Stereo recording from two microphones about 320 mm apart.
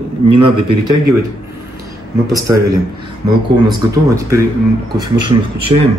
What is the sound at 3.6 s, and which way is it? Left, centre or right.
Speech, centre.